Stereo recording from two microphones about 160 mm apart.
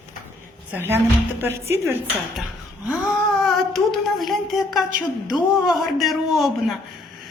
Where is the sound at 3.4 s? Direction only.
Centre (ahead or behind).